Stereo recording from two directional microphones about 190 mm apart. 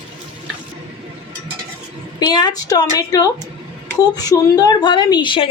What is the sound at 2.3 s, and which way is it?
A woman's voice, 20° left (ahead or behind).